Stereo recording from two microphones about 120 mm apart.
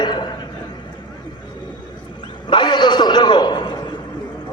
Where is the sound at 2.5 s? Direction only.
40° left (ahead or behind).